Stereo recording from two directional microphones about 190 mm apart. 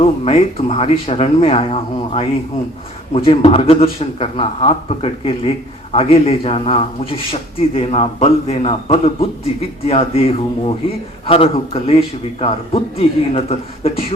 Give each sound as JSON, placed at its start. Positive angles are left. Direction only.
{"t": 0.0, "sound": "a man's voice", "side_deg": 30}